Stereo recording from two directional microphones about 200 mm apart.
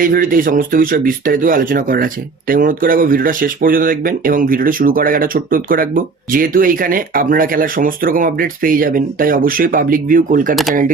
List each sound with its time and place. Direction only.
0.0 s speech: 45° right (ahead or behind)
10.5 s speech: centre (ahead or behind)